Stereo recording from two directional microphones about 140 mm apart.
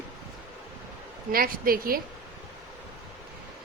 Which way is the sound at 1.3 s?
90° right.